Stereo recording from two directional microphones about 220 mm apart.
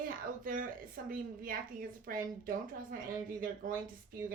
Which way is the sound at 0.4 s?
40° right (ahead or behind).